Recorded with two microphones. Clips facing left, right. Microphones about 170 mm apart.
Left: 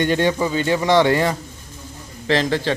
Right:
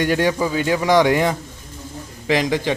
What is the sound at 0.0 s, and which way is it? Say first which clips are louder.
A man's voice: even; 10° right (ahead or behind).